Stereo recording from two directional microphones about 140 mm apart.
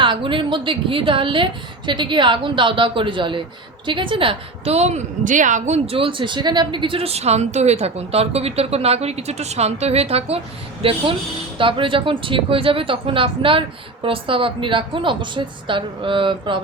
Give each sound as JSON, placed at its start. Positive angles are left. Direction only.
{"t": 0.0, "sound": "a woman's voice", "side_deg": -35}